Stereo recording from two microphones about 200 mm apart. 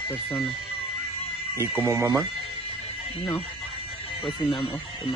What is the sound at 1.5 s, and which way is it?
Speech, 10° right (ahead or behind).